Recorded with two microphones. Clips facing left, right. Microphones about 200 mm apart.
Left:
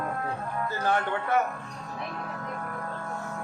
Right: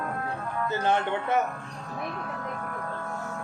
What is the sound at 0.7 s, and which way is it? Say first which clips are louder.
Speech: right 2 dB; 25° right (ahead or behind).